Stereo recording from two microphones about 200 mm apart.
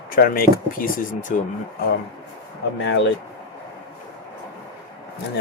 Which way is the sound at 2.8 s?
60° left (ahead or behind).